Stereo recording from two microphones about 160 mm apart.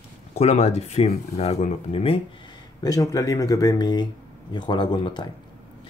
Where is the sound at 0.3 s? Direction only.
45° left (ahead or behind).